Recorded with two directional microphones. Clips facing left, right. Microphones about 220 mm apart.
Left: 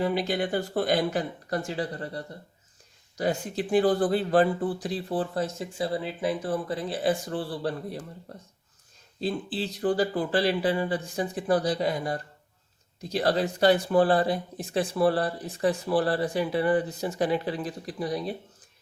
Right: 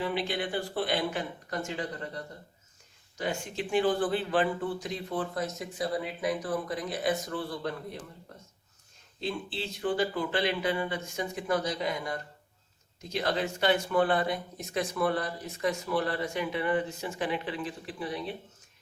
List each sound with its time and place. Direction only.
0.0 s speech: 40° left (ahead or behind)
9.2 s speech: 35° left (ahead or behind)